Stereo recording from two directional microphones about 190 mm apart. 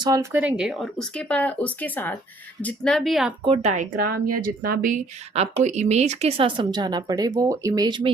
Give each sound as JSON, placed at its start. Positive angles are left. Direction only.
{"t": 0.0, "sound": "speech", "side_deg": -15}
{"t": 3.4, "sound": "speech", "side_deg": -35}